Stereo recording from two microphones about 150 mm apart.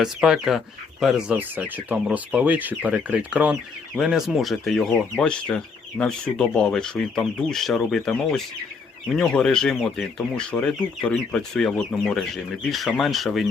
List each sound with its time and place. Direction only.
0.0 s speech: 5° right (ahead or behind)